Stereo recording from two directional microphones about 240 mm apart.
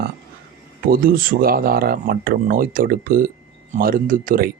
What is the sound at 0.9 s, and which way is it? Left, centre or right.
Speech, right.